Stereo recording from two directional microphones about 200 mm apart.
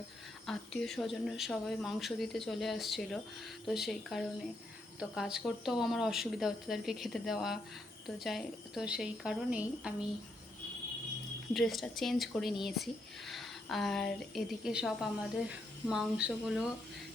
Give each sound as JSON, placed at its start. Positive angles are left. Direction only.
{"t": 0.4, "sound": "speech", "side_deg": 5}
{"t": 11.5, "sound": "speech", "side_deg": 0}